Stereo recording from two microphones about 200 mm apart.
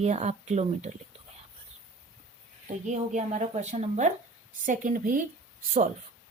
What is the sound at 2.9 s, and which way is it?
A woman's voice, 35° right (ahead or behind).